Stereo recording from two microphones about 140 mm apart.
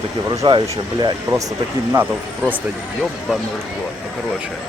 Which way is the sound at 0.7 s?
30° right (ahead or behind).